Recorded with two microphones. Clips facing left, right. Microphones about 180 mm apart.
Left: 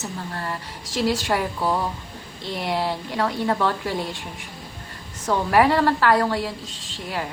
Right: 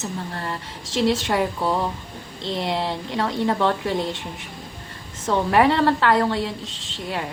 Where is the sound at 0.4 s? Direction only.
25° right (ahead or behind).